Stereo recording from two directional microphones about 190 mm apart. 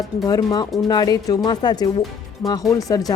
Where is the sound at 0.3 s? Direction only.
20° left (ahead or behind).